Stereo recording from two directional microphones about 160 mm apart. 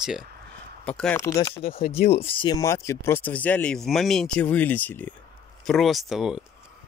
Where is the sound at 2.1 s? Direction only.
35° left (ahead or behind).